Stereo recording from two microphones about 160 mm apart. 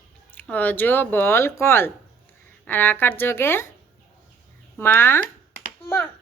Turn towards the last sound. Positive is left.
turn(degrees=15)  # may be behind; listen again after turning